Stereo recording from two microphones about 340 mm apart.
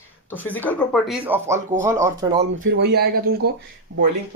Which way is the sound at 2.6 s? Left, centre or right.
Right.